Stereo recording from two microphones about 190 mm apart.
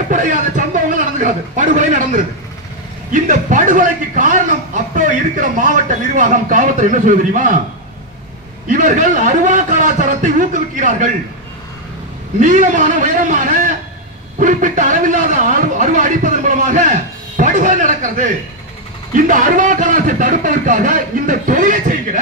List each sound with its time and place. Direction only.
0.1 s a man's voice: 40° right (ahead or behind)
8.6 s a man's voice: 45° right (ahead or behind)
12.4 s a man's voice: 40° right (ahead or behind)